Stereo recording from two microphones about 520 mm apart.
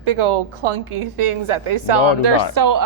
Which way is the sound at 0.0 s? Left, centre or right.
Right.